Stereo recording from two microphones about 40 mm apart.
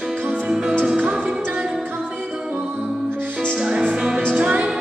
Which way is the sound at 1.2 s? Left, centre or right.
Right.